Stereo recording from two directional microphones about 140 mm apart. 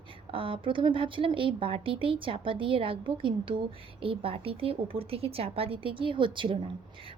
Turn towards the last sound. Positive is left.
turn(degrees=-35)  # may be behind; listen again after turning